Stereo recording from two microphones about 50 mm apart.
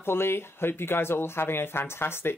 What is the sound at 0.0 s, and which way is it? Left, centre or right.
Speech, left.